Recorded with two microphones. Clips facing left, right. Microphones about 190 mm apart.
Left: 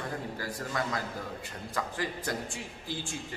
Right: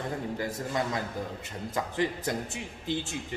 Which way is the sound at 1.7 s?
20° right (ahead or behind).